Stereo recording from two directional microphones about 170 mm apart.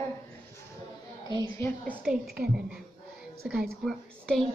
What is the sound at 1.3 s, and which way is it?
Speech, 15° left (ahead or behind).